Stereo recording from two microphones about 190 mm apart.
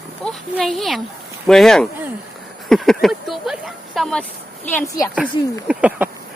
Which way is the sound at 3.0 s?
Centre (ahead or behind).